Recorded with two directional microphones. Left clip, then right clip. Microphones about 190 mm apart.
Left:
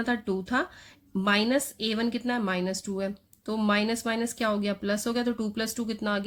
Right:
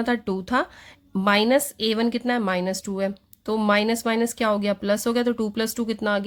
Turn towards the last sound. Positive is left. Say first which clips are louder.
# right 6 dB
turn(degrees=-30)  # may be behind; listen again after turning